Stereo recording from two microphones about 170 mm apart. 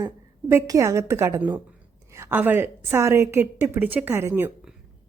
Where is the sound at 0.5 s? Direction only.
20° right (ahead or behind).